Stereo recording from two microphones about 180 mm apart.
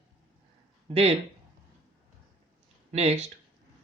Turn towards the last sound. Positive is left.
turn(degrees=-35)  # may be behind; listen again after turning